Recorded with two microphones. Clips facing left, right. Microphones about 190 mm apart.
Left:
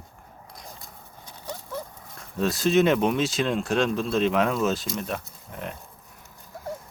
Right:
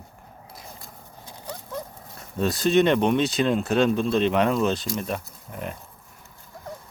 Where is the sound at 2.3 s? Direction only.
Centre (ahead or behind).